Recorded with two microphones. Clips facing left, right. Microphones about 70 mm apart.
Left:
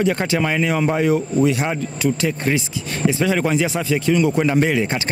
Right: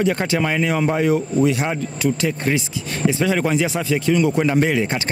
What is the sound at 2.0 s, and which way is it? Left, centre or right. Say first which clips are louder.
Speech: even; centre.